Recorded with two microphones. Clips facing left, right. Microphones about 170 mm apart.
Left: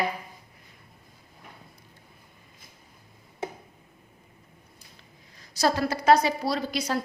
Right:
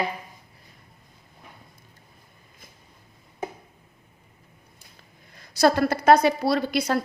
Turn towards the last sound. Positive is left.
turn(degrees=-60)  # may be behind; listen again after turning